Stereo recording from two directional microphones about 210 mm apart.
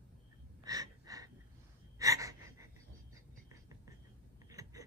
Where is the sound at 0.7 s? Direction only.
15° right (ahead or behind).